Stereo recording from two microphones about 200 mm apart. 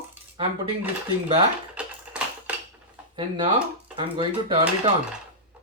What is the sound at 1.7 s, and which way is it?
Typing, 5° right (ahead or behind).